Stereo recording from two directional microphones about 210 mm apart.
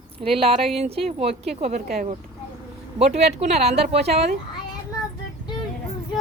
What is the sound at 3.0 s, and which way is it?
Speech, 30° right (ahead or behind).